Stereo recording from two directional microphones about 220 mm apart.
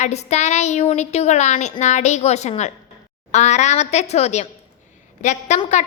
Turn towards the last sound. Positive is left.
turn(degrees=30)  # may be behind; listen again after turning